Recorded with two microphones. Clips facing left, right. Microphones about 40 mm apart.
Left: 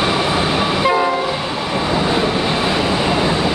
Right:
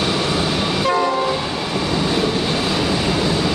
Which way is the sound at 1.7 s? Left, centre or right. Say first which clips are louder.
Left 3 dB; left.